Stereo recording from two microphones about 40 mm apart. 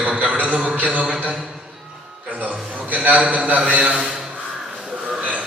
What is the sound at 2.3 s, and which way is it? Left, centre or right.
A man's voice, right.